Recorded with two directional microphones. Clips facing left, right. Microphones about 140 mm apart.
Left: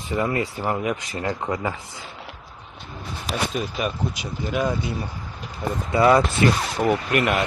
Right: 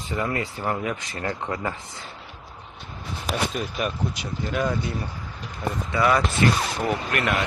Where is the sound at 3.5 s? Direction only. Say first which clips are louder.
Left 2 dB; 5° left (ahead or behind).